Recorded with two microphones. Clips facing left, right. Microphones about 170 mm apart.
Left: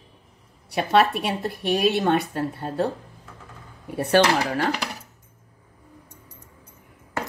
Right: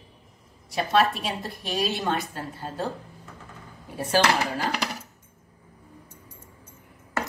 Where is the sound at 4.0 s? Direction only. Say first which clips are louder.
Left 4 dB; 65° left (ahead or behind).